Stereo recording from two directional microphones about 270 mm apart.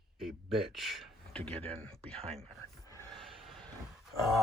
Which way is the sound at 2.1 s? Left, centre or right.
Right.